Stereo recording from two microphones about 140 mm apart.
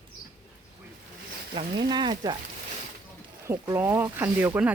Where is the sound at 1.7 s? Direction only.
30° right (ahead or behind).